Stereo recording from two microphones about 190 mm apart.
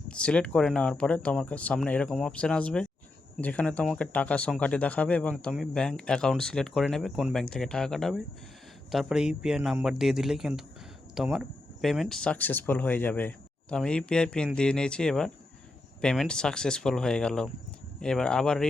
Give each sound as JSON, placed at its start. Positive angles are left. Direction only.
{"t": 0.1, "sound": "speech", "side_deg": 5}